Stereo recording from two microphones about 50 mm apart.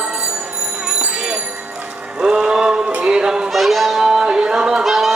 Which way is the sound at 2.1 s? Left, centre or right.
Centre.